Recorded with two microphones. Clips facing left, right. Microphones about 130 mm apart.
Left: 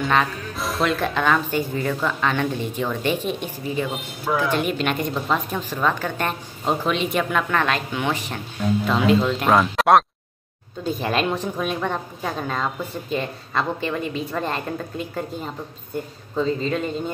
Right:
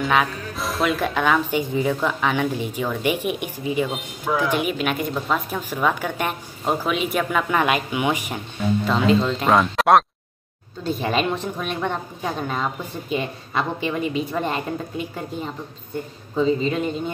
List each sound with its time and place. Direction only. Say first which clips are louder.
0.0 s a woman's voice: even; centre (ahead or behind)
3.9 s a woman's voice: even; centre (ahead or behind)
8.5 s a woman's voice: even; centre (ahead or behind)